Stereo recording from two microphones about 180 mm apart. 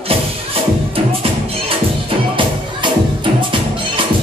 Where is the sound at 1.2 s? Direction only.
30° right (ahead or behind).